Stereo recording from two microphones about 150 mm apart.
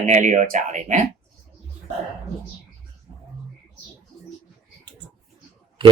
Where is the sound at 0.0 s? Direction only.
55° right (ahead or behind).